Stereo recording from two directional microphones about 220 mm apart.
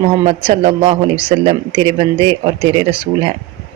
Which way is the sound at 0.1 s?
25° right (ahead or behind).